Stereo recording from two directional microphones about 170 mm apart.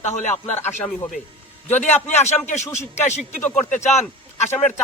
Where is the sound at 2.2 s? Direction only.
40° left (ahead or behind).